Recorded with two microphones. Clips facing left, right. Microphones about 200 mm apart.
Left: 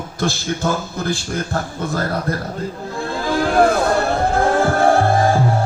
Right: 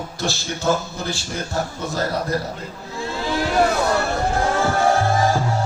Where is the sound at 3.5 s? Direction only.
55° left (ahead or behind).